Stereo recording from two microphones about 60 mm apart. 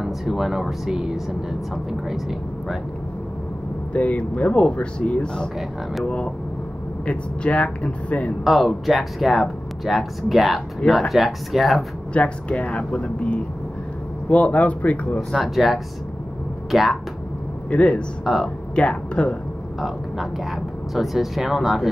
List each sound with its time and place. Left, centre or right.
0.0 s speech: centre
3.9 s speech: left
8.5 s speech: centre
12.1 s speech: left
15.4 s speech: centre
17.6 s speech: left
18.2 s speech: centre
18.8 s speech: left
19.8 s speech: centre